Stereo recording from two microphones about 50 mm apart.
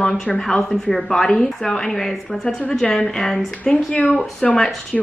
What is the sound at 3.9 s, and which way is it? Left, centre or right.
Speech, left.